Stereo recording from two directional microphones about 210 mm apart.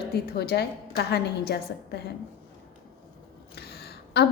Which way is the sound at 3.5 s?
50° left (ahead or behind).